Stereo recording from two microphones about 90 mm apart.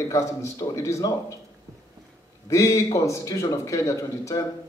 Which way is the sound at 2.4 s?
40° left (ahead or behind).